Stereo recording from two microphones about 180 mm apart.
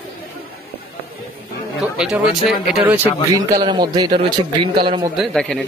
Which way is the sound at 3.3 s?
20° right (ahead or behind).